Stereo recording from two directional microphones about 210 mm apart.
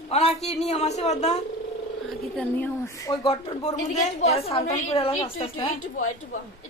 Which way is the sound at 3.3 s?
30° left (ahead or behind).